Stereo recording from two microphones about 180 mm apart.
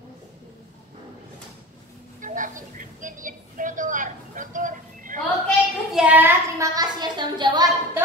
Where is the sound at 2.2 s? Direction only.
45° right (ahead or behind).